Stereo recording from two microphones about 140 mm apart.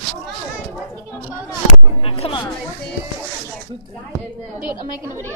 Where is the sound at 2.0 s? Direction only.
40° left (ahead or behind).